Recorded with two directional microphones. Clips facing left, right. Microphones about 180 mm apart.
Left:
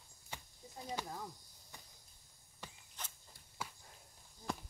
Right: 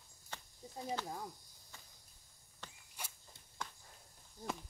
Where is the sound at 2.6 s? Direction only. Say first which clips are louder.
Left 2 dB; 10° left (ahead or behind).